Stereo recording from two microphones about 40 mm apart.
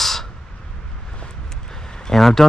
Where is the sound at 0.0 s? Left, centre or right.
Centre.